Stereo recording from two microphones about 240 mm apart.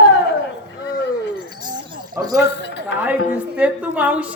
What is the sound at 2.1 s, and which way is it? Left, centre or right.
Speech, centre.